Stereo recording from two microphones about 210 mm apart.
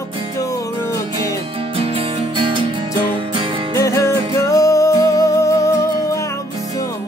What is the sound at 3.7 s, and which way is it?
Music, 15° left (ahead or behind).